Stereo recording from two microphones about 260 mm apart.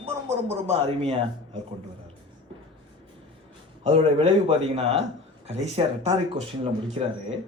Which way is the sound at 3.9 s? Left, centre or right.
Right.